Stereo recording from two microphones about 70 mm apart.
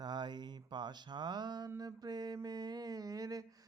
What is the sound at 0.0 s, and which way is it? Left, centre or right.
Mantra, right.